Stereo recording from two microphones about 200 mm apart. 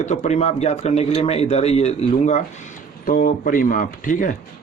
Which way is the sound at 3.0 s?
45° left (ahead or behind).